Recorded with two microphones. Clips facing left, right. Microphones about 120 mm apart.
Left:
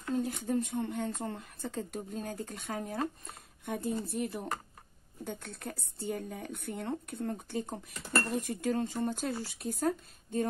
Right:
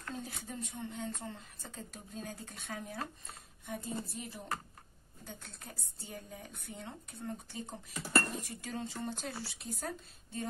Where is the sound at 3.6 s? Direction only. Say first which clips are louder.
Left 6 dB; 55° left (ahead or behind).